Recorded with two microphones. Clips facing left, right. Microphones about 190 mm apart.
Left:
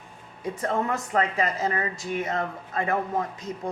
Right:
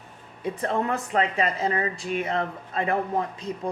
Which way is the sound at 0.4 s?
30° right (ahead or behind).